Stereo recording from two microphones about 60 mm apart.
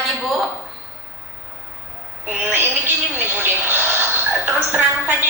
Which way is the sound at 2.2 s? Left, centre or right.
Right.